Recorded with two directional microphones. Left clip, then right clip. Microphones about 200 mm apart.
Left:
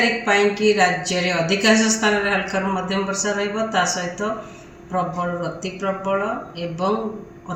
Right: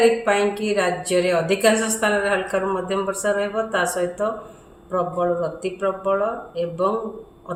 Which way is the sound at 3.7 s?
25° right (ahead or behind).